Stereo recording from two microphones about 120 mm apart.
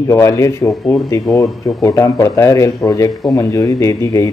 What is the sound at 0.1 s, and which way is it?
Speech, 25° left (ahead or behind).